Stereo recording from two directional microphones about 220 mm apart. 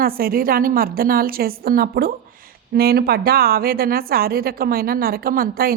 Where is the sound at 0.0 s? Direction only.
40° right (ahead or behind).